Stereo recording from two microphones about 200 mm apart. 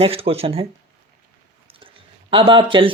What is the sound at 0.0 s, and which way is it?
Speech, 30° right (ahead or behind).